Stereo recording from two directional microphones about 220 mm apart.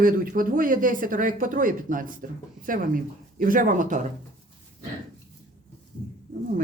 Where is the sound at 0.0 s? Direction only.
40° right (ahead or behind).